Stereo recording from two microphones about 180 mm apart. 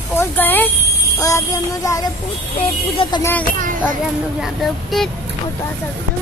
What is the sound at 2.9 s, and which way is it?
Music, 30° left (ahead or behind).